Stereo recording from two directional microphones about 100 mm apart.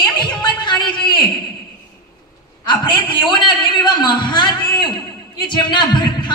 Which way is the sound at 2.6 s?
50° left (ahead or behind).